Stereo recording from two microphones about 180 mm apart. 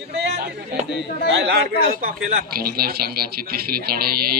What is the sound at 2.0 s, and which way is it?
Speech, 50° right (ahead or behind).